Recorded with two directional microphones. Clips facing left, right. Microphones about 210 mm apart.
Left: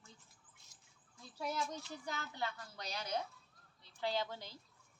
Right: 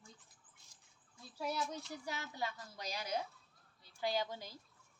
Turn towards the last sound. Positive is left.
turn(degrees=-10)  # may be behind; listen again after turning